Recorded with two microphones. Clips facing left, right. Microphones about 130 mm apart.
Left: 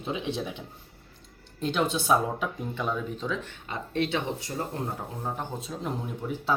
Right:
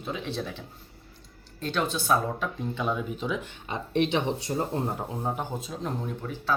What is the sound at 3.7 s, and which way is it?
Speech, 20° right (ahead or behind).